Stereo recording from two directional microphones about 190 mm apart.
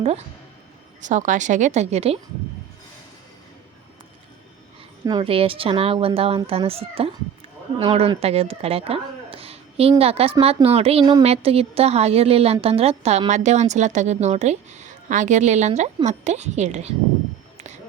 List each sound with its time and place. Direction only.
1.0 s a woman's voice: 40° right (ahead or behind)
5.0 s a woman's voice: 25° right (ahead or behind)